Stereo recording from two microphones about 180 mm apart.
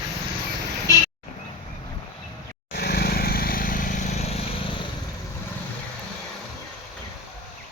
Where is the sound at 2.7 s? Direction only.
60° left (ahead or behind); by 4.6 s 35° left (ahead or behind).